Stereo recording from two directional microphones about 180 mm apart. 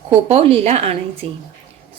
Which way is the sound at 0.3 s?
35° right (ahead or behind).